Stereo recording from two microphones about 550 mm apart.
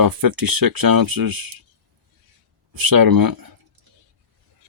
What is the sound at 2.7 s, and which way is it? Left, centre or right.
Speech, right.